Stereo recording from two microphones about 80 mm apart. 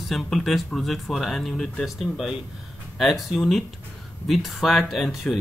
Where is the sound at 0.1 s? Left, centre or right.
Centre.